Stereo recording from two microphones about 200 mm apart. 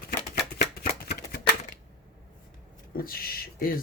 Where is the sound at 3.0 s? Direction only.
50° left (ahead or behind).